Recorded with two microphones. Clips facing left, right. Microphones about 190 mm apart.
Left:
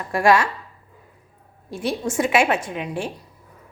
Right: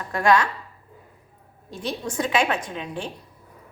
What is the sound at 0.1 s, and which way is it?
Speech, 10° left (ahead or behind).